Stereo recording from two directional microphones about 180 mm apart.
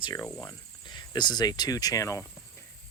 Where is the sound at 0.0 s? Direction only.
20° left (ahead or behind).